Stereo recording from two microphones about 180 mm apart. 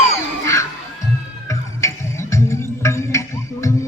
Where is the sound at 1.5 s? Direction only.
15° left (ahead or behind).